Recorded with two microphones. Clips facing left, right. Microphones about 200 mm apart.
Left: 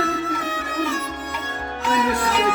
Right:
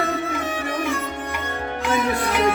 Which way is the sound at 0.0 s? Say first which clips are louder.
Even; 50° right (ahead or behind).